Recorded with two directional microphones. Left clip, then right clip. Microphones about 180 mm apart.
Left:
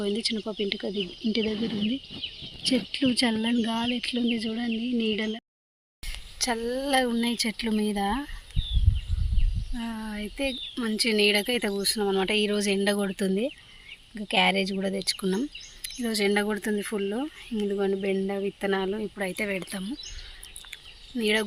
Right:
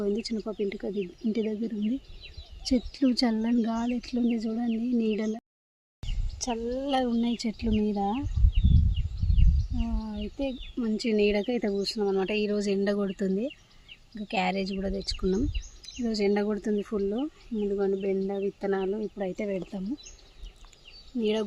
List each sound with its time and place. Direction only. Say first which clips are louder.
0.2 s speech: left 5 dB; centre (ahead or behind)
0.4 s speech: left 2 dB; 15° left (ahead or behind)
2.6 s speech: left 1 dB; 5° left (ahead or behind)
6.4 s speech: left 3 dB; 10° left (ahead or behind)
9.7 s speech: left 2 dB; 10° left (ahead or behind); by 11.7 s 25° right (ahead or behind)
11.9 s speech: left 3 dB; 20° left (ahead or behind)
14.9 s speech: right 1 dB; centre (ahead or behind)
17.7 s speech: left 1 dB; 20° left (ahead or behind)
19.1 s speech: left 2 dB; 10° right (ahead or behind)
21.2 s speech: left 3 dB; centre (ahead or behind)